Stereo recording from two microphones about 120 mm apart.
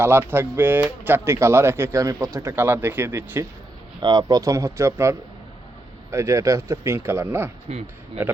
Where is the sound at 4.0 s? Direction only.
35° right (ahead or behind); by 7.5 s 20° right (ahead or behind).